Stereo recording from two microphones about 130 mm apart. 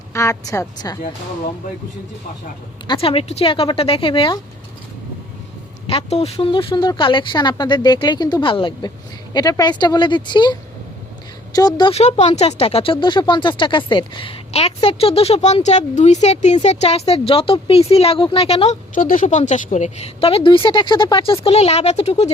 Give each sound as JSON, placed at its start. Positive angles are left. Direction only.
{"t": 0.1, "sound": "a woman's voice", "side_deg": 25}
{"t": 2.8, "sound": "speech", "side_deg": 40}
{"t": 5.9, "sound": "speech", "side_deg": 50}
{"t": 11.9, "sound": "speech", "side_deg": 55}
{"t": 18.9, "sound": "speech", "side_deg": 90}
{"t": 21.4, "sound": "speech", "side_deg": 50}